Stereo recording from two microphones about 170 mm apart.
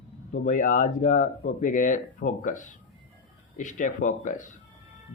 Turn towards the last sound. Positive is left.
turn(degrees=50)  # may be behind; listen again after turning